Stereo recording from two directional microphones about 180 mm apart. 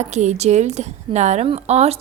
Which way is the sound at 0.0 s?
40° right (ahead or behind).